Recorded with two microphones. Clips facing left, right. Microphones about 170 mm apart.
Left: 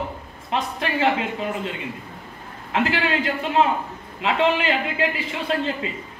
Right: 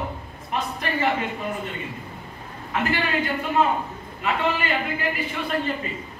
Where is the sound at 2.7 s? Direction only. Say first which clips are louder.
Left 2 dB; 90° left.